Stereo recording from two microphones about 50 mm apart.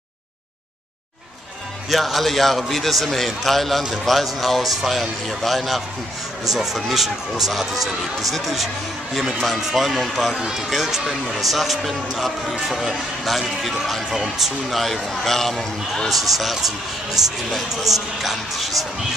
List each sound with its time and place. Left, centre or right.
1.9 s speech: centre